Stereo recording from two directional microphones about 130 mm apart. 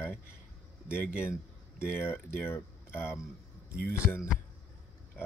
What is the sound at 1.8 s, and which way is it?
Speech, 15° left (ahead or behind).